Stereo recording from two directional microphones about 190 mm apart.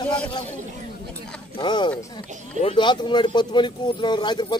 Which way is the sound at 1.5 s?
25° left (ahead or behind).